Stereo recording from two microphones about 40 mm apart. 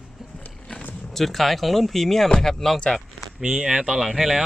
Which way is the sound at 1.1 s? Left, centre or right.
Centre.